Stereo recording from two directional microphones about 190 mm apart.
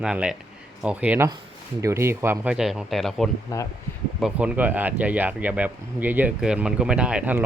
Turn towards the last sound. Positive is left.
turn(degrees=-5)  # may be behind; listen again after turning